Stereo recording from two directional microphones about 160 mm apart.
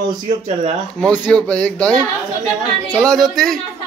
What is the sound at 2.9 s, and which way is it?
Speech, centre (ahead or behind).